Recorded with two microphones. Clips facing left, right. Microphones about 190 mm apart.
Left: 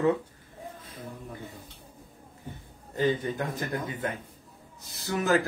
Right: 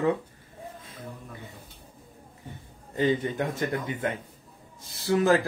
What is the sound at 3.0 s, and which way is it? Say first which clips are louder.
Speech: right 2 dB; 20° right (ahead or behind).